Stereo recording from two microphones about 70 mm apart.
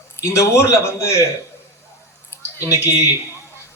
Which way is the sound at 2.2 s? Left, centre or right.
Left.